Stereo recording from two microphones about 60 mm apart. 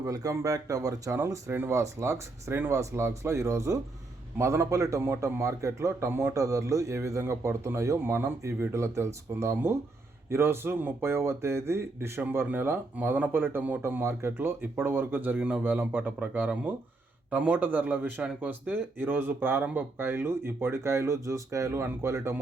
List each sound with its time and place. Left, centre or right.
0.0 s speech: right
0.3 s speech: right
1.1 s speech: right
6.1 s speech: right
13.0 s speech: right
14.0 s speech: right